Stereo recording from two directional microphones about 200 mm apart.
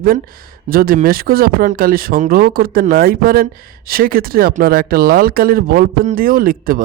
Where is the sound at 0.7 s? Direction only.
45° right (ahead or behind).